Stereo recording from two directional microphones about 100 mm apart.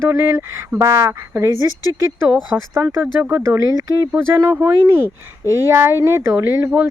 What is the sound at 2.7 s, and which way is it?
Speech, 20° right (ahead or behind).